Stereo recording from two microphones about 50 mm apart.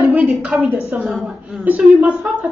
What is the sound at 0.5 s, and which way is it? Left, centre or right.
Speech, centre.